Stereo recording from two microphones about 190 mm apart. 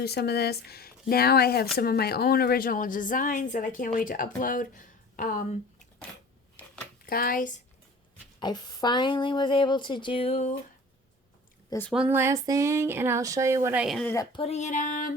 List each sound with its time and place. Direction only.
0.0 s a woman's voice: 60° left (ahead or behind)
7.0 s speech: 50° left (ahead or behind)
8.4 s speech: 20° left (ahead or behind)
11.9 s speech: 10° right (ahead or behind)
13.8 s speech: centre (ahead or behind)
14.3 s a sound: 35° left (ahead or behind)